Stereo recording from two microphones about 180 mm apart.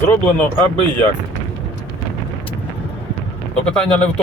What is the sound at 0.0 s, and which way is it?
Speech, 10° left (ahead or behind).